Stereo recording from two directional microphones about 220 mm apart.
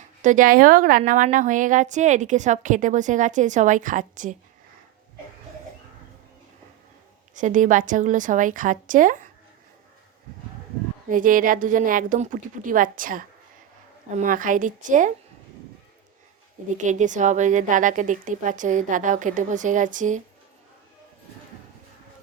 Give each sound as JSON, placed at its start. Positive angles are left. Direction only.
{"t": 0.2, "sound": "a woman's voice", "side_deg": -35}
{"t": 7.3, "sound": "a woman's voice", "side_deg": -35}
{"t": 11.1, "sound": "a woman's voice", "side_deg": -40}
{"t": 16.7, "sound": "a woman's voice", "side_deg": -35}